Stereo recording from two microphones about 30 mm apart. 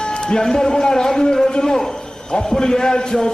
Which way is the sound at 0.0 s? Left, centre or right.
Left.